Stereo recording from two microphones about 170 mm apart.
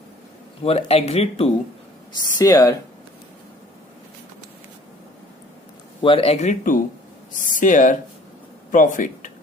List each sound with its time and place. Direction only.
0.6 s speech: 35° left (ahead or behind)
2.1 s speech: 20° left (ahead or behind)
6.0 s speech: 30° left (ahead or behind); by 9.3 s 50° left (ahead or behind)